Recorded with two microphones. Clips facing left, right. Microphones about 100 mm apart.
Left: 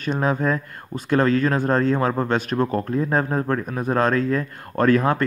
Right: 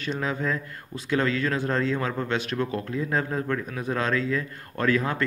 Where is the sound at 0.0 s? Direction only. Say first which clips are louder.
Left 6 dB; 45° left (ahead or behind).